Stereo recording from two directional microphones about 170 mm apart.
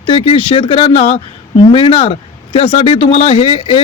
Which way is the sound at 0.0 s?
30° left (ahead or behind).